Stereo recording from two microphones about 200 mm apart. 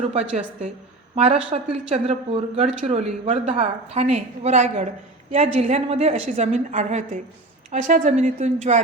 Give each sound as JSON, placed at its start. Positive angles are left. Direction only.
{"t": 0.0, "sound": "a woman's voice", "side_deg": -30}